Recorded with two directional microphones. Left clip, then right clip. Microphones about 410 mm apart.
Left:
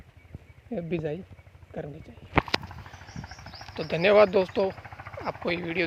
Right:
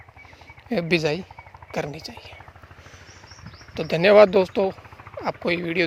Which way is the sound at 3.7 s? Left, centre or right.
Right.